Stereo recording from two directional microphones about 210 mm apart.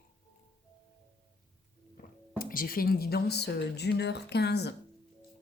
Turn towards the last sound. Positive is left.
turn(degrees=50)  # may be behind; listen again after turning